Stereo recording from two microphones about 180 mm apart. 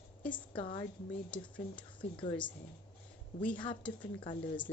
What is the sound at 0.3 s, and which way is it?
Speech, 25° left (ahead or behind).